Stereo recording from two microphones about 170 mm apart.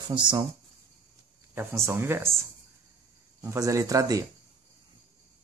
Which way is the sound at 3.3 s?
20° right (ahead or behind).